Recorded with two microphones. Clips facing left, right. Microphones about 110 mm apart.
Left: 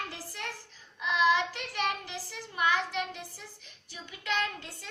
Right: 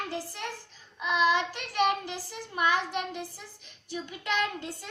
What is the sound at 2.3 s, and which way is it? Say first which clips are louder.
Speech: right 2 dB; 20° right (ahead or behind).